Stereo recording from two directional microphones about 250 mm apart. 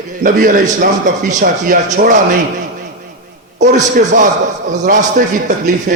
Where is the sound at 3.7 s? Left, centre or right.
Right.